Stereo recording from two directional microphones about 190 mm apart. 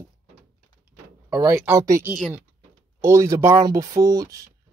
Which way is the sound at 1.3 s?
20° right (ahead or behind).